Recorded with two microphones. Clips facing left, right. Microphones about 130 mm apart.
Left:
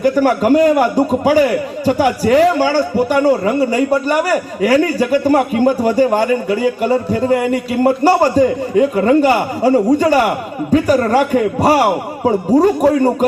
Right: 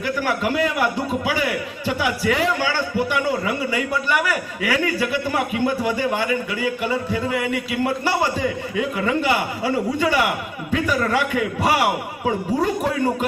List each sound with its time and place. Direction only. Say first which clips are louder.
0.0 s a man's voice: left 10 dB; 45° left (ahead or behind)